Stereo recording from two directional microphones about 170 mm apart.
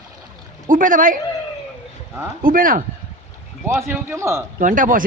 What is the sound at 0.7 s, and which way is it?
Speech, 50° right (ahead or behind).